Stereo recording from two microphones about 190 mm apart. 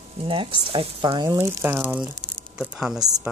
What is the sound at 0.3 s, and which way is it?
Speech, 25° right (ahead or behind).